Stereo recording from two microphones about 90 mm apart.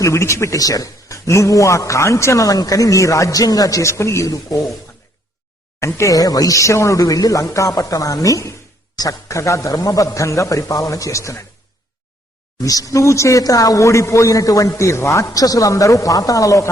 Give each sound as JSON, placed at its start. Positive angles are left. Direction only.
{"t": 0.0, "sound": "a man's voice", "side_deg": 35}
{"t": 6.0, "sound": "a man's voice", "side_deg": 40}
{"t": 12.6, "sound": "a man's voice", "side_deg": 40}